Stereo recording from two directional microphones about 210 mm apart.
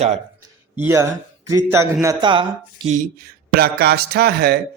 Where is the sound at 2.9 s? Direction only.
40° right (ahead or behind).